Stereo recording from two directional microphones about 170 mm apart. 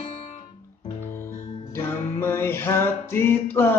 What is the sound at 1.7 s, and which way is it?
Music, 15° left (ahead or behind).